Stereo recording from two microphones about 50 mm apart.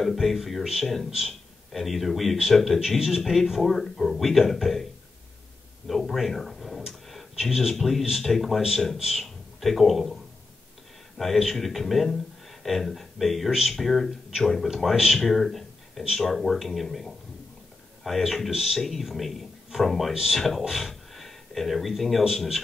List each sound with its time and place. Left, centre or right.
0.0 s a man's voice: centre
5.9 s speech: centre
11.5 s speech: centre
20.6 s a sound: centre
22.3 s speech: centre